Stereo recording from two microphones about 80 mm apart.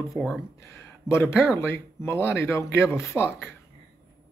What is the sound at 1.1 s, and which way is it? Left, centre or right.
A man's voice, left.